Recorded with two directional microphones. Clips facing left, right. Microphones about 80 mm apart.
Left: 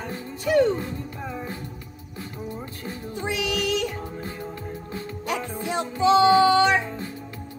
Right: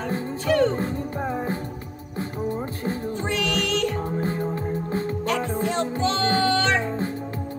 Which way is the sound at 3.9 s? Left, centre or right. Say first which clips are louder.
Right 8 dB; right.